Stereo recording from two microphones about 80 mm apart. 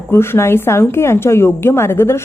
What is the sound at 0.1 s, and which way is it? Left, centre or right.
A woman's voice, left.